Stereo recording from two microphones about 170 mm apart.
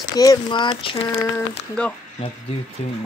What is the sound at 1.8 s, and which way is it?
Speech, 5° left (ahead or behind).